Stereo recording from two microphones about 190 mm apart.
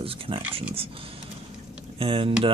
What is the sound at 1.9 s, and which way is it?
Speech, 30° right (ahead or behind).